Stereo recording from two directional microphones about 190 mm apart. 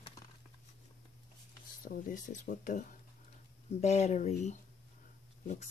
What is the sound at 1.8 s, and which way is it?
Speech, 45° left (ahead or behind).